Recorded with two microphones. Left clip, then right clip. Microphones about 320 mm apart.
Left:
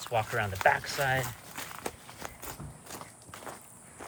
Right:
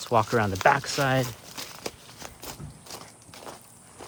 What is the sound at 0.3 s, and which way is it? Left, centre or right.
Speech, right.